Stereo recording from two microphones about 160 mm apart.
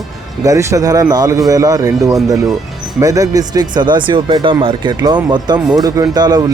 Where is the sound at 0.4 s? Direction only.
20° right (ahead or behind).